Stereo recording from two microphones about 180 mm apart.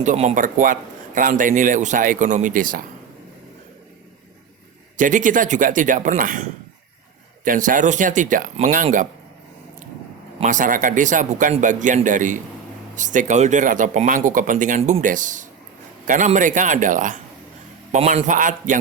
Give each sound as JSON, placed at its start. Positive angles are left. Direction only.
{"t": 0.0, "sound": "speech", "side_deg": -40}
{"t": 4.9, "sound": "speech", "side_deg": -45}
{"t": 10.4, "sound": "speech", "side_deg": -45}